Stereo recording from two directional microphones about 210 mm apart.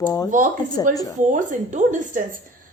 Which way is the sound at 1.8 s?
35° right (ahead or behind).